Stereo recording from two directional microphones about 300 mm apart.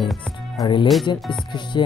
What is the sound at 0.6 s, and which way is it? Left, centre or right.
Speech, centre.